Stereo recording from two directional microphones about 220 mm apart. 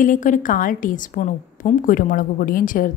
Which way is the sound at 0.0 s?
35° left (ahead or behind).